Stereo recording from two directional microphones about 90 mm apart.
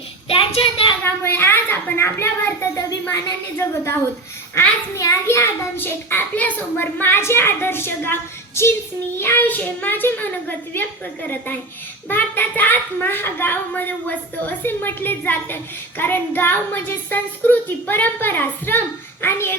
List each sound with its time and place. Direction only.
0.3 s child singing: 85° left
1.0 s a child's voice: 25° left (ahead or behind)
4.5 s a child's voice: 35° left (ahead or behind)